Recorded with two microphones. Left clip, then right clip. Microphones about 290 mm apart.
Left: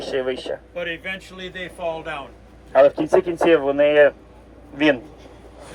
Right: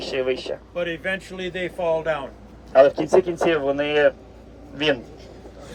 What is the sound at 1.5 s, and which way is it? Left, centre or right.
Speech, right.